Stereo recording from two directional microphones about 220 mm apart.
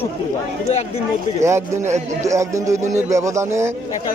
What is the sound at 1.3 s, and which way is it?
A man's voice, 10° right (ahead or behind).